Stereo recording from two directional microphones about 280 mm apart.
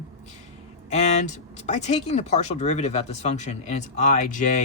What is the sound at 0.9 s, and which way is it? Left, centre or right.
Speech, left.